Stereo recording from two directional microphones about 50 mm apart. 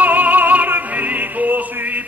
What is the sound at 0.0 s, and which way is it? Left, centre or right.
Opera, right.